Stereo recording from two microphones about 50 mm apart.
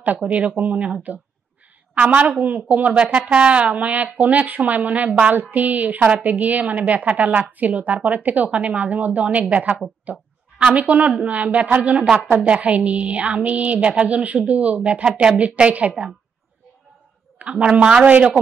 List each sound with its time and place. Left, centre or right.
0.2 s a woman's voice: right
2.0 s a woman's voice: right
17.4 s a woman's voice: right